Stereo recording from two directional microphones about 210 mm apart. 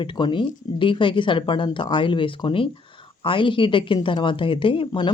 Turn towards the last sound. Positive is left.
turn(degrees=25)  # may be behind; listen again after turning